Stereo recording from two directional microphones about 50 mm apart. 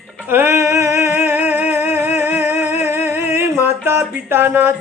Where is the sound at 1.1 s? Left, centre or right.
Right.